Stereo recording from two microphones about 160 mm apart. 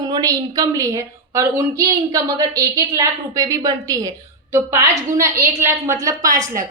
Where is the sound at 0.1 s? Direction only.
25° right (ahead or behind).